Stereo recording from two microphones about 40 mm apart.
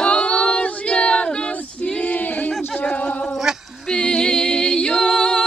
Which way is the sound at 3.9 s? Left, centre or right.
Centre.